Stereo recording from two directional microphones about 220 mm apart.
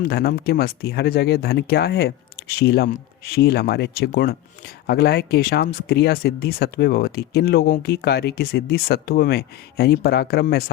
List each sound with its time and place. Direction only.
0.0 s speech: 45° left (ahead or behind)